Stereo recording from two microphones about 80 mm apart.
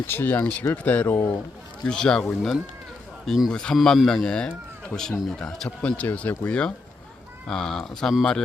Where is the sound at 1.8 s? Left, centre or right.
Centre.